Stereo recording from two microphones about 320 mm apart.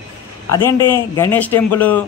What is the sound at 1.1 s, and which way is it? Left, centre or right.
Speech, centre.